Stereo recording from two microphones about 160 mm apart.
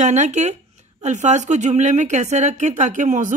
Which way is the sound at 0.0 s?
45° right (ahead or behind).